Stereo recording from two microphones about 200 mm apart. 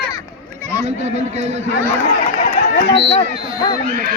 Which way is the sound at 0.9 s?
35° right (ahead or behind).